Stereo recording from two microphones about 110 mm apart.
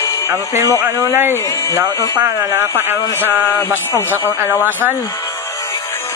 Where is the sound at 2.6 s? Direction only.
20° right (ahead or behind).